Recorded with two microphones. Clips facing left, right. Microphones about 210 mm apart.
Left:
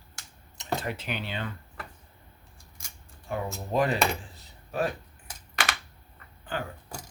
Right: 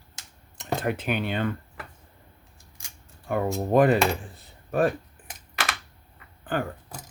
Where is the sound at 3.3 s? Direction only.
55° right (ahead or behind).